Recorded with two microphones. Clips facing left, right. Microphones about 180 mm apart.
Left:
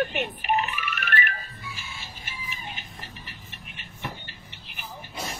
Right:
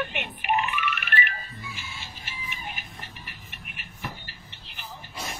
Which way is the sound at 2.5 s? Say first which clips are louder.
Right 1 dB; 30° left (ahead or behind).